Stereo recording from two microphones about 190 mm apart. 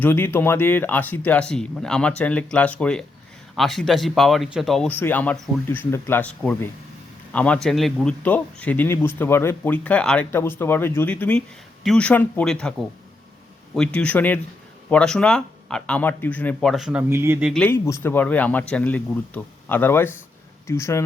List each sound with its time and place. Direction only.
0.0 s a man's voice: 10° left (ahead or behind)
13.7 s a man's voice: 5° left (ahead or behind); by 17.5 s 10° right (ahead or behind)
17.5 s a man's voice: 5° left (ahead or behind)